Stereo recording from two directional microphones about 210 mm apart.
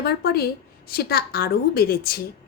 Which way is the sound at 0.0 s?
45° left (ahead or behind).